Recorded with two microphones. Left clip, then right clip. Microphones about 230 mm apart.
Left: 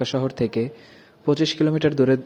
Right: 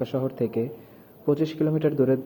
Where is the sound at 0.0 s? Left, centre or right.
Left.